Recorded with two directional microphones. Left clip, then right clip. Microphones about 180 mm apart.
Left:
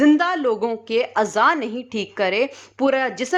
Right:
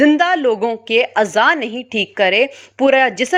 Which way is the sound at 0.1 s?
10° right (ahead or behind).